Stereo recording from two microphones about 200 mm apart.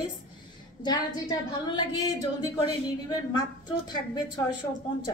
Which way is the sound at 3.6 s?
20° left (ahead or behind).